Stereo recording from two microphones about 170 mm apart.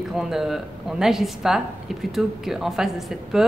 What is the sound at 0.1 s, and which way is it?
Speech, 5° right (ahead or behind).